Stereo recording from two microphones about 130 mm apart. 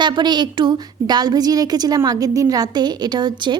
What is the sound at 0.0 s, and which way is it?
A woman's voice, 35° right (ahead or behind).